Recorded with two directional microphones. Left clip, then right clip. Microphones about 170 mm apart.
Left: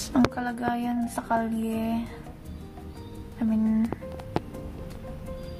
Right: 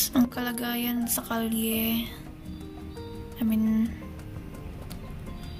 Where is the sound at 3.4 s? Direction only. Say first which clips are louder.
Left 1 dB; 5° right (ahead or behind).